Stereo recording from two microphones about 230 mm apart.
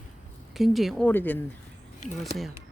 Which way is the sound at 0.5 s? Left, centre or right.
Centre.